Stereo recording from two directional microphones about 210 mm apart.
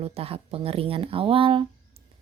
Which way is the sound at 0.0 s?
30° right (ahead or behind).